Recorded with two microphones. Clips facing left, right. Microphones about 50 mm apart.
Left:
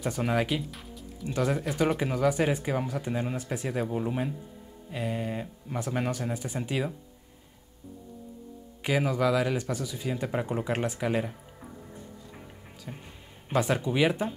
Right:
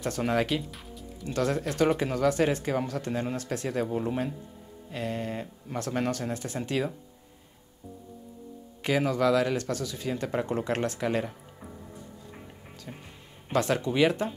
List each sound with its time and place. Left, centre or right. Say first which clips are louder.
0.0 s speech: right 1 dB; centre
1.2 s speech: even; centre
8.8 s speech: right 1 dB; centre
12.9 s speech: left 1 dB; centre
13.5 s speech: even; centre